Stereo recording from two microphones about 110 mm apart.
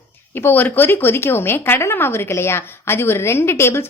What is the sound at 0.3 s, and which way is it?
A woman's voice, 20° left (ahead or behind).